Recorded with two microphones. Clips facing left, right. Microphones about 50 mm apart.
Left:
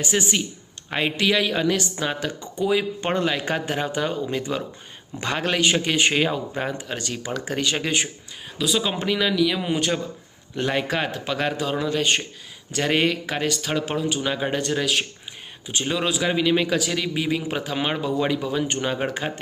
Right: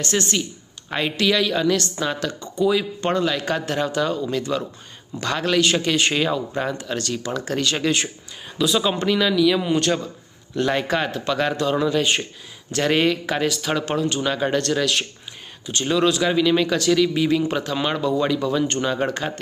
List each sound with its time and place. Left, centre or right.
0.0 s speech: centre